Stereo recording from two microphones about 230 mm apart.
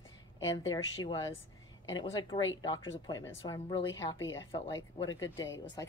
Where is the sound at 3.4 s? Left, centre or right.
Centre.